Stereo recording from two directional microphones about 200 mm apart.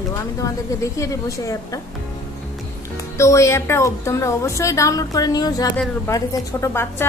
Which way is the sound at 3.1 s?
15° left (ahead or behind).